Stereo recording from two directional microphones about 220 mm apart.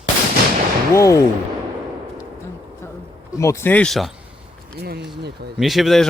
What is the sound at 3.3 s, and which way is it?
Speech, 15° left (ahead or behind).